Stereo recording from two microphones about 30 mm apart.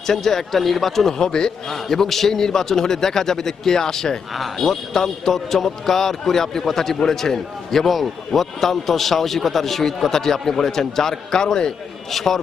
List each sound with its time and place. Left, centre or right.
0.1 s a man's voice: centre
1.2 s a man's voice: left
1.7 s a man's voice: centre
12.1 s a man's voice: centre